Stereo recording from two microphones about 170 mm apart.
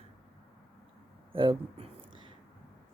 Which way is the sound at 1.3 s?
30° right (ahead or behind).